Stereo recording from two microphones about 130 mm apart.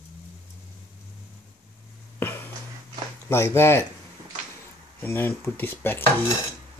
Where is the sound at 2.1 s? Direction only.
15° left (ahead or behind).